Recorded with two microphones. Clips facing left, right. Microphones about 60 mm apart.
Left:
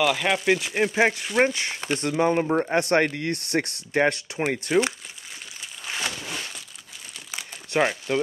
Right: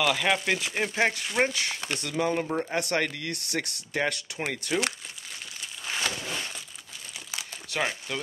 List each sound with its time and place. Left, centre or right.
0.0 s speech: centre
1.4 s speech: left
5.9 s a sound: centre
7.3 s crumpling: centre